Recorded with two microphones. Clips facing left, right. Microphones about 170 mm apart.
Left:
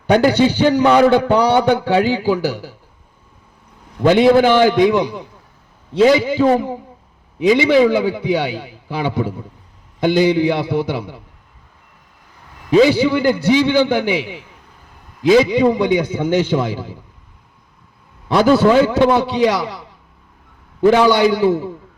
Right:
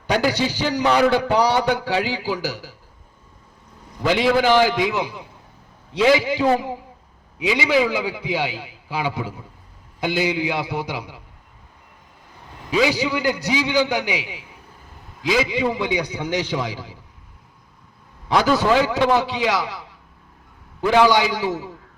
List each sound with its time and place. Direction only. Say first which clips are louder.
0.1 s a man's voice: left 8 dB; 55° left (ahead or behind)
4.0 s a man's voice: left 7 dB; 50° left (ahead or behind)
12.9 s a man's voice: left 7 dB; 55° left (ahead or behind)
18.3 s a man's voice: left 6 dB; 50° left (ahead or behind)
20.8 s a man's voice: left 5 dB; 50° left (ahead or behind)